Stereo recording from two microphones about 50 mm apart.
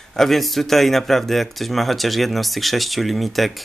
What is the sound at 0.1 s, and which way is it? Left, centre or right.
Speech, centre.